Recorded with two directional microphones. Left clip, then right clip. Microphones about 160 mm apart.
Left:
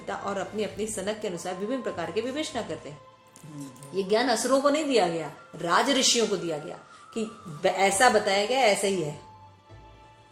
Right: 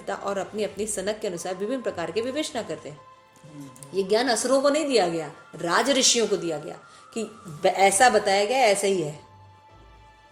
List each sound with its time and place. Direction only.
0.0 s speech: 50° right (ahead or behind)
3.9 s speech: 50° right (ahead or behind)